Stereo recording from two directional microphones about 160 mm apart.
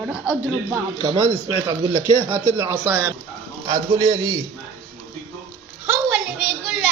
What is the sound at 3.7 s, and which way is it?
Speech, 25° right (ahead or behind).